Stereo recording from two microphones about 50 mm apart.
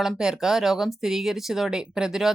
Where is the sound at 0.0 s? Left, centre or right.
Centre.